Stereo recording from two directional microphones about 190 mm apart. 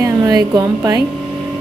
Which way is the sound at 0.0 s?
15° right (ahead or behind).